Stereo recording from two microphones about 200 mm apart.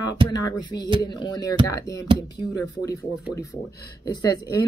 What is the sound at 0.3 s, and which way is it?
A woman's voice, 20° left (ahead or behind).